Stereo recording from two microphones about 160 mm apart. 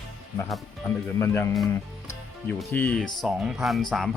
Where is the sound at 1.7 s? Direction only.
15° left (ahead or behind).